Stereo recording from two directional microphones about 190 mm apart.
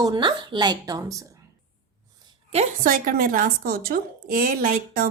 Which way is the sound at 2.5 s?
45° right (ahead or behind).